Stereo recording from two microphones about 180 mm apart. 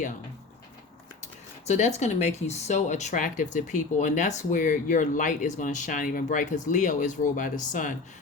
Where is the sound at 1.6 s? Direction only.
40° left (ahead or behind).